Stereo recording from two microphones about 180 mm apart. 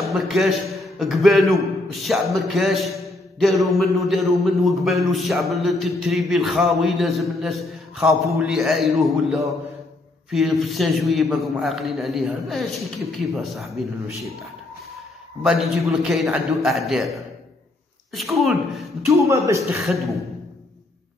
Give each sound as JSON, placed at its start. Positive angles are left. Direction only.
{"t": 0.1, "sound": "a man's voice", "side_deg": 0}
{"t": 15.4, "sound": "a man's voice", "side_deg": 0}
{"t": 18.1, "sound": "a man's voice", "side_deg": 0}
{"t": 19.0, "sound": "speech", "side_deg": -15}
{"t": 19.9, "sound": "a man's voice", "side_deg": 0}